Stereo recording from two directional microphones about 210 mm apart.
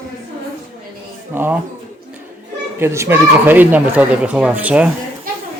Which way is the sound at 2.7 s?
10° right (ahead or behind).